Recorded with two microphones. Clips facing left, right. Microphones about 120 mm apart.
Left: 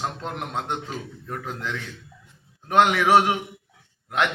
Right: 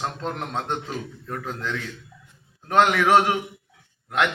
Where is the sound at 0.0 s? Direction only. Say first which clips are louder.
Right 1 dB; 15° left (ahead or behind).